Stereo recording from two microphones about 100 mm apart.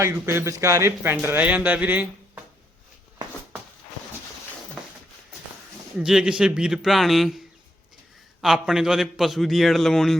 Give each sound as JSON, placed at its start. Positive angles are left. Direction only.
{"t": 0.0, "sound": "a man's voice", "side_deg": -25}
{"t": 6.0, "sound": "a man's voice", "side_deg": -5}